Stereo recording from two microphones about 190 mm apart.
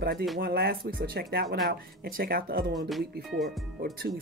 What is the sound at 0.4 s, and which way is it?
Speech, 55° right (ahead or behind).